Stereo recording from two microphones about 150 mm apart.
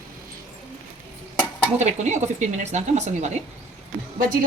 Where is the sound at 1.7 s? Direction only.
50° right (ahead or behind).